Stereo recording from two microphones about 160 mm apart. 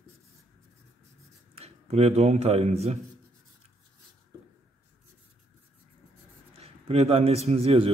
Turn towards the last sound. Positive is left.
turn(degrees=-40)  # may be behind; listen again after turning